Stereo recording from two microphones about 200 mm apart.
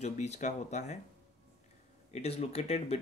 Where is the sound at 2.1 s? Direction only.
30° left (ahead or behind).